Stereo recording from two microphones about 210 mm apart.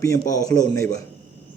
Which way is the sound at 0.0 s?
15° left (ahead or behind).